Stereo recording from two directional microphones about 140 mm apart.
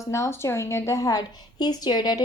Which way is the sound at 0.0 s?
20° left (ahead or behind).